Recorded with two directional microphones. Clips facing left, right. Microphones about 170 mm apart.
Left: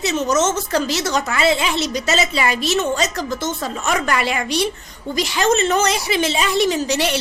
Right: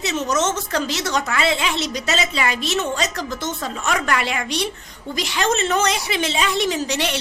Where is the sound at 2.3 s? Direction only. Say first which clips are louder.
Left 3 dB; 35° left (ahead or behind).